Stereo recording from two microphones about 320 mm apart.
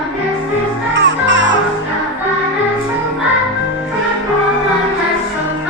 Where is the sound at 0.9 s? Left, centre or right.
Right.